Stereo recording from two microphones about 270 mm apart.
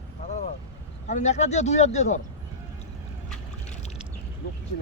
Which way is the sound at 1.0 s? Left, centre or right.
Left.